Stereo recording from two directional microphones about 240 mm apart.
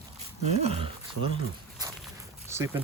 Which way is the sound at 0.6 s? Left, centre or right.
Right.